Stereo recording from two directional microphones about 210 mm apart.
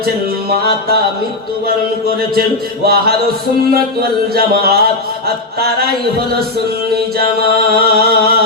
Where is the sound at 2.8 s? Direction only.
45° right (ahead or behind).